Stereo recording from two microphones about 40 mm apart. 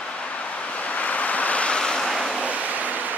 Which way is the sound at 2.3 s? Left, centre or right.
Right.